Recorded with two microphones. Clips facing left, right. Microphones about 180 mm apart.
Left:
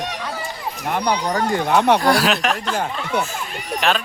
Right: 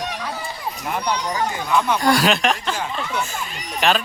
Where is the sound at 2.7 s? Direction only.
60° left (ahead or behind).